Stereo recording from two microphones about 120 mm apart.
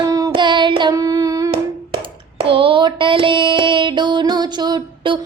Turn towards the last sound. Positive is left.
turn(degrees=-40)  # may be behind; listen again after turning